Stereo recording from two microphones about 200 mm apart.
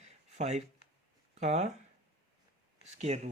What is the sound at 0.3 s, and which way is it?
Speech, 35° right (ahead or behind).